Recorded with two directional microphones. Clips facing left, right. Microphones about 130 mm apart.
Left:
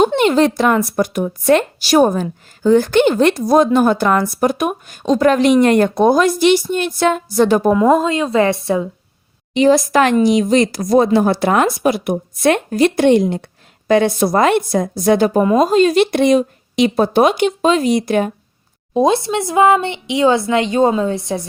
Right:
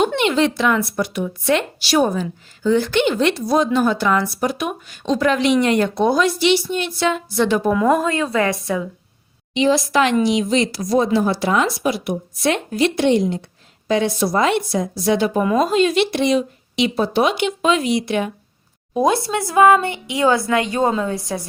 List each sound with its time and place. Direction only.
0.2 s speech: 40° left (ahead or behind)
7.7 s speech: 25° left (ahead or behind)
9.6 s speech: 45° left (ahead or behind)
18.9 s speech: 25° left (ahead or behind)